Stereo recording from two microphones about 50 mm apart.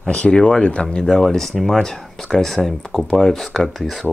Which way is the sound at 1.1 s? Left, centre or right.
Centre.